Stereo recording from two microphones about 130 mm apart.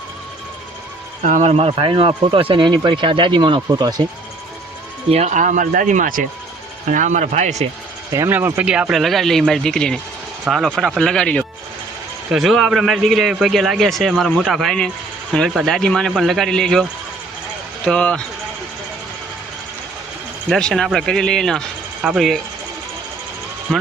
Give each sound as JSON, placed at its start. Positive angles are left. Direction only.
{"t": 1.2, "sound": "speech", "side_deg": -70}
{"t": 5.1, "sound": "speech", "side_deg": -65}
{"t": 6.9, "sound": "speech", "side_deg": -70}
{"t": 8.1, "sound": "a man's voice", "side_deg": -20}
{"t": 17.8, "sound": "speech", "side_deg": 5}
{"t": 20.5, "sound": "a man's voice", "side_deg": 5}